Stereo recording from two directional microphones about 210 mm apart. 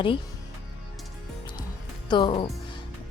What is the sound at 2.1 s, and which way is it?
Speech, 25° left (ahead or behind).